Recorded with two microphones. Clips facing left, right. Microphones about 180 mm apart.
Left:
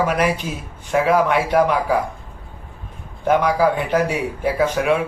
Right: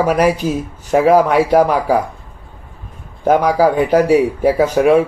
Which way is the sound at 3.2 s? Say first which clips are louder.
Right 4 dB; 40° right (ahead or behind).